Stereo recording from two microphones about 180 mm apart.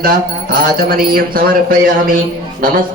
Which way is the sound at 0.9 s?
55° right (ahead or behind).